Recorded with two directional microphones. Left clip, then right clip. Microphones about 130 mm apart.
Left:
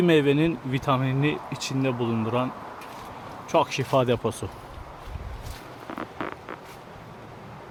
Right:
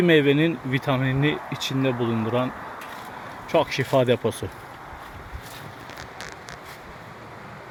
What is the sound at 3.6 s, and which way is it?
Speech, 10° right (ahead or behind).